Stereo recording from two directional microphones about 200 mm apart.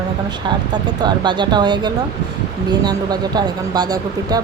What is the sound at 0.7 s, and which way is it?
Speech, 20° right (ahead or behind).